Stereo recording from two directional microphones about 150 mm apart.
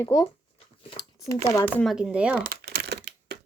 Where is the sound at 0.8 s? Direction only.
35° left (ahead or behind).